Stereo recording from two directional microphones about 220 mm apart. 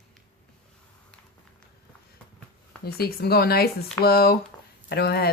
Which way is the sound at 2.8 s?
45° left (ahead or behind).